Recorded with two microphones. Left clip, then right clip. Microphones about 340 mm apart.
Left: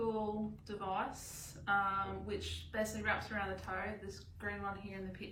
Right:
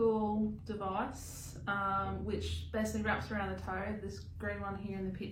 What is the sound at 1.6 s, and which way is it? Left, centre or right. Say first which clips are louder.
A woman's voice: even; centre.